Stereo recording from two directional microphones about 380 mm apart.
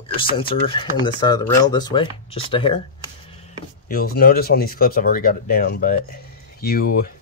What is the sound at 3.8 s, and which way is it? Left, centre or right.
Speech, left.